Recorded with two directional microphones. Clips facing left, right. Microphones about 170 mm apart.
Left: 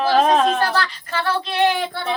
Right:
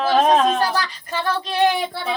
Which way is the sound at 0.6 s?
15° right (ahead or behind).